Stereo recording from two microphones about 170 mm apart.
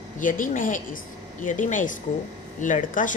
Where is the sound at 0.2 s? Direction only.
50° left (ahead or behind).